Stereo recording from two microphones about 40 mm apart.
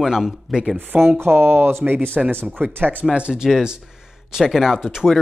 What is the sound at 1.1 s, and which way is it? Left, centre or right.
Speech, right.